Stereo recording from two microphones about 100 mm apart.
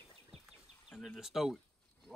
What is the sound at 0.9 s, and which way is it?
Speech, centre (ahead or behind).